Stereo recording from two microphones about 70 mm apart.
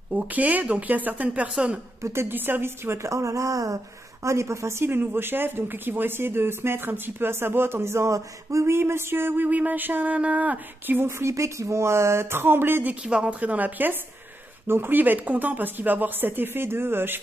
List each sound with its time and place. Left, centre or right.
0.1 s speech: centre
2.0 s a woman's voice: right
11.0 s a woman's voice: right
13.0 s speech: centre; by 17.2 s right